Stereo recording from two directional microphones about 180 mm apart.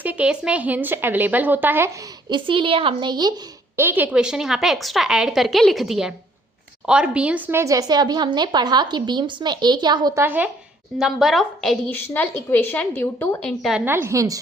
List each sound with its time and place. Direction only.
0.0 s speech: 10° right (ahead or behind)
2.3 s speech: 30° right (ahead or behind)
3.8 s a woman's voice: 10° right (ahead or behind)
10.2 s a woman's voice: 10° right (ahead or behind)
13.8 s speech: 15° right (ahead or behind)